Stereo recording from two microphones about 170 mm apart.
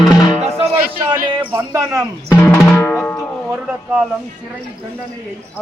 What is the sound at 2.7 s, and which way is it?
Music, 10° left (ahead or behind).